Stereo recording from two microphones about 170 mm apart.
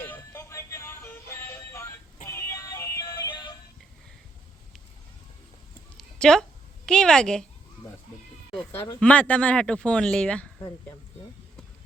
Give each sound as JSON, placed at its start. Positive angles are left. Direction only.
{"t": 0.0, "sound": "music", "side_deg": 15}
{"t": 6.0, "sound": "a sound", "side_deg": 5}
{"t": 6.8, "sound": "a woman's voice", "side_deg": 5}
{"t": 9.0, "sound": "speech", "side_deg": 10}